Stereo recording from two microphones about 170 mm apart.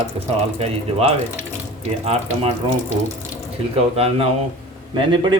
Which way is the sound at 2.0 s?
35° right (ahead or behind).